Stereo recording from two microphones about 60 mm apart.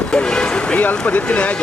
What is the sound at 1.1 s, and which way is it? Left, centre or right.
Speech, left.